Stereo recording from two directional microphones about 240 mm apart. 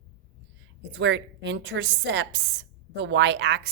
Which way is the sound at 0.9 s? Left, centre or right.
Right.